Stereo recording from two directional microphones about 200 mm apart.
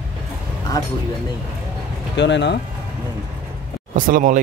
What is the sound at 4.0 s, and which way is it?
Speech, 45° right (ahead or behind).